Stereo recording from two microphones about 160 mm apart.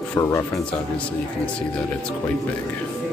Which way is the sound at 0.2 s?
20° left (ahead or behind).